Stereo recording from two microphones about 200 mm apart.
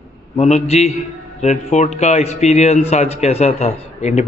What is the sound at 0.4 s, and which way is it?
A man's voice, 35° left (ahead or behind).